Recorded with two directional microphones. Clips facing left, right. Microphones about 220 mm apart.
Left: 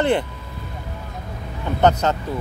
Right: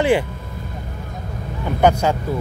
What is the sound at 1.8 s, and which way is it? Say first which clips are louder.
Speech: right 1 dB; 10° right (ahead or behind).